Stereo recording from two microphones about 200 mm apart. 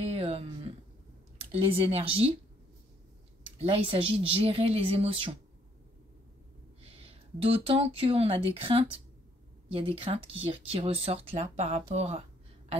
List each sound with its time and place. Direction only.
0.0 s a sound: 30° right (ahead or behind)
1.4 s speech: 30° right (ahead or behind)
3.5 s speech: 30° right (ahead or behind)
6.8 s speech: 30° right (ahead or behind)